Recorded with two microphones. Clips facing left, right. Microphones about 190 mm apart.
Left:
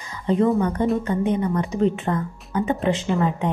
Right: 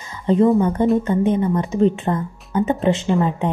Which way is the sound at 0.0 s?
25° right (ahead or behind).